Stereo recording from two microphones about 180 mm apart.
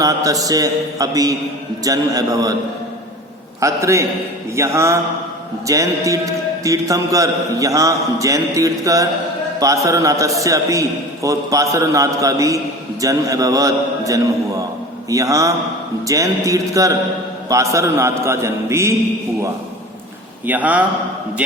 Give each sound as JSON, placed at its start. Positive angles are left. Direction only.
{"t": 0.0, "sound": "a man's voice", "side_deg": -20}
{"t": 3.6, "sound": "a man's voice", "side_deg": -15}
{"t": 20.5, "sound": "a man's voice", "side_deg": -10}